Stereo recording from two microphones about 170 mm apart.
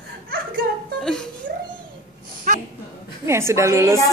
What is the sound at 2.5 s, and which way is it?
Speech, 55° right (ahead or behind).